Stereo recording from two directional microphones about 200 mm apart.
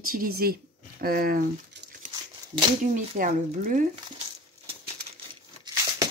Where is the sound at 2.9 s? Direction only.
40° right (ahead or behind).